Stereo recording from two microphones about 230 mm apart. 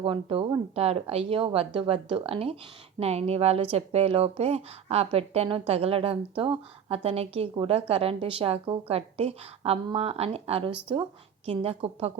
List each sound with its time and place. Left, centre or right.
0.0 s speech: right